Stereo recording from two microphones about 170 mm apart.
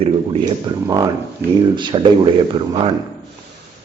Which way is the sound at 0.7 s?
25° right (ahead or behind).